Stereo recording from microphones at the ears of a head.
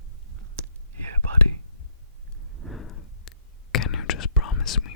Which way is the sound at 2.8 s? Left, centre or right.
Left.